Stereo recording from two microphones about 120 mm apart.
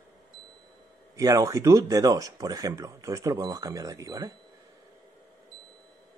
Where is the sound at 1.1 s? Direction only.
30° right (ahead or behind).